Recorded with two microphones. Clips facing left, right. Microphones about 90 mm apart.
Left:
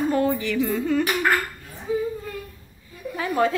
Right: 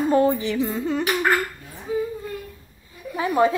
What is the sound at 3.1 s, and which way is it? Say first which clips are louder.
Speech: right 3 dB; 20° right (ahead or behind).